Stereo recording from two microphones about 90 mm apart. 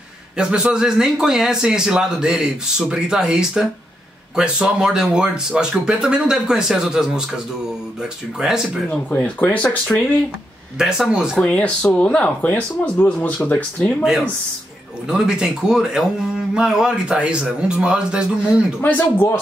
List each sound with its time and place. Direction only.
0.4 s a man's voice: 10° right (ahead or behind)
8.9 s speech: 15° left (ahead or behind)
10.8 s a man's voice: 5° right (ahead or behind)
11.3 s speech: 15° left (ahead or behind)
15.0 s a man's voice: 5° right (ahead or behind)
18.8 s speech: 20° left (ahead or behind)